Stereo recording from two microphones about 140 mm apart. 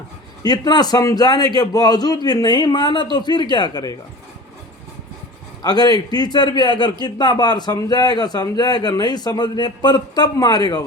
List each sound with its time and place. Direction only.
0.4 s a man's voice: 30° left (ahead or behind)
5.6 s a man's voice: 30° left (ahead or behind)